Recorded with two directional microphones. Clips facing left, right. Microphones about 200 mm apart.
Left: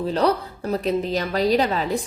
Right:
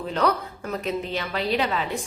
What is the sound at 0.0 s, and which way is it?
A woman's voice, 35° left (ahead or behind).